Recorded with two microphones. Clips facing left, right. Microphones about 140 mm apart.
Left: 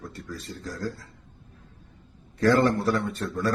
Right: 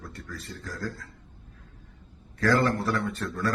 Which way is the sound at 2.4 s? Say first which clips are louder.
Left 3 dB; 20° left (ahead or behind).